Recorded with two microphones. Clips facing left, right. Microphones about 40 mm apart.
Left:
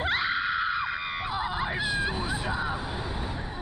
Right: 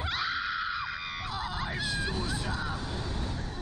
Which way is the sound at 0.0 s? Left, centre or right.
Left.